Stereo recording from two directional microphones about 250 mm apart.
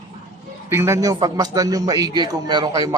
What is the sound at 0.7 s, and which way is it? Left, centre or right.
A man's voice, centre.